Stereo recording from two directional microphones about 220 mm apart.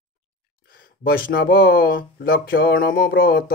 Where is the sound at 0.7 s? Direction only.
40° left (ahead or behind).